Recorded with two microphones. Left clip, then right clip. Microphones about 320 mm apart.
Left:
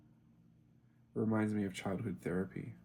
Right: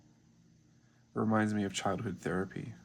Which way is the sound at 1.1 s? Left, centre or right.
Right.